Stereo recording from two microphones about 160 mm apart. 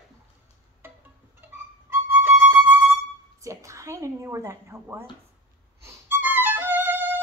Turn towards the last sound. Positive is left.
turn(degrees=-15)  # may be behind; listen again after turning